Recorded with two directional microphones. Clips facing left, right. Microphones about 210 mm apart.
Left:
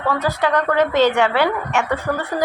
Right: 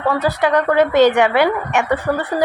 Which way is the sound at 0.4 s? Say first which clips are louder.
Right 3 dB; 10° right (ahead or behind).